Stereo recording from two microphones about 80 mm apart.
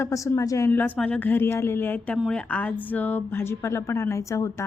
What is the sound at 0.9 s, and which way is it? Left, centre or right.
A woman's voice, centre.